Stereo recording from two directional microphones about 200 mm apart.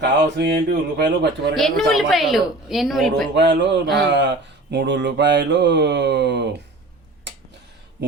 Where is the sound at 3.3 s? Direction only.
60° right (ahead or behind).